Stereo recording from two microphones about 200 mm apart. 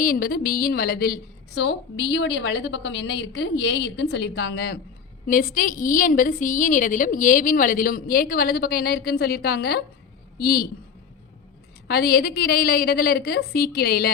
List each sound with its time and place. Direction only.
0.0 s a woman's voice: 45° left (ahead or behind)
11.9 s a woman's voice: 50° left (ahead or behind)